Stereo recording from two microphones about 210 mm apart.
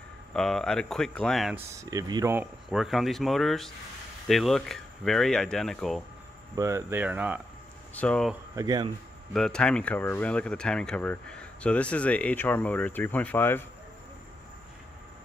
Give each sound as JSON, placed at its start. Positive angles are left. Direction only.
{"t": 0.3, "sound": "speech", "side_deg": 0}
{"t": 1.7, "sound": "speech", "side_deg": -15}
{"t": 6.5, "sound": "speech", "side_deg": -15}
{"t": 7.9, "sound": "speech", "side_deg": 5}
{"t": 8.5, "sound": "speech", "side_deg": -20}
{"t": 9.3, "sound": "speech", "side_deg": 5}